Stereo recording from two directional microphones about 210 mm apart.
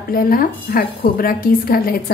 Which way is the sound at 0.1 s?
45° left (ahead or behind).